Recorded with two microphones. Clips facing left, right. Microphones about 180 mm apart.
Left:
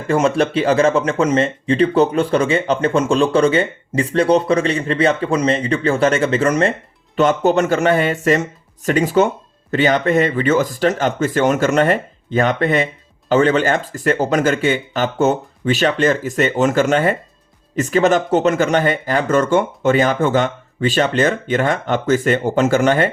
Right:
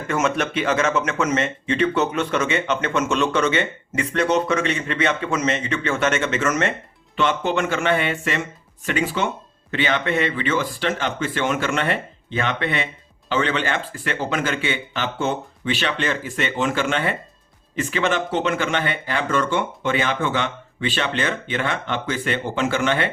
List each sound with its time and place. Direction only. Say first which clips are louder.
0.1 s speech: left 7 dB; 30° left (ahead or behind)